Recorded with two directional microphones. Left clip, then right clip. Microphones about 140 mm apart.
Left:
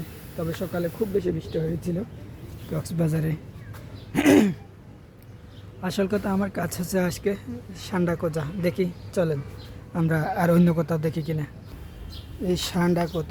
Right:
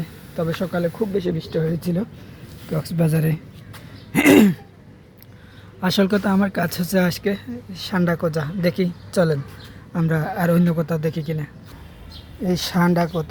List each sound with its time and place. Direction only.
0.3 s speech: 25° right (ahead or behind)
2.6 s speech: 5° right (ahead or behind)
5.8 s speech: 35° right (ahead or behind)
9.9 s speech: 5° left (ahead or behind)
12.5 s speech: centre (ahead or behind)